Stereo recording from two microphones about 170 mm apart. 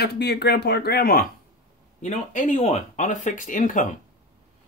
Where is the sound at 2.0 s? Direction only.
45° left (ahead or behind).